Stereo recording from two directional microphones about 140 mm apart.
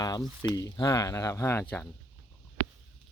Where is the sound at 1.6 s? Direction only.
10° left (ahead or behind).